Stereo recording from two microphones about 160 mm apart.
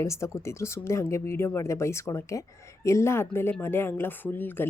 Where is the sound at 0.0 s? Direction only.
20° left (ahead or behind).